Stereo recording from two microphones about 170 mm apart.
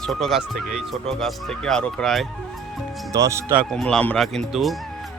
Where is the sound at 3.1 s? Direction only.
15° right (ahead or behind).